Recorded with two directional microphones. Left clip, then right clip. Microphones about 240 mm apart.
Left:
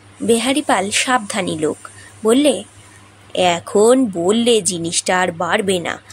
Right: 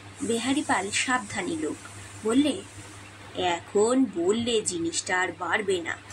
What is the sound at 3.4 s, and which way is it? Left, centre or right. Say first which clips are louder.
Speech: left 10 dB; left.